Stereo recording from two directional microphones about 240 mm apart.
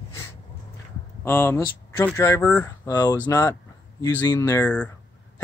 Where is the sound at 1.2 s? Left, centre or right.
Centre.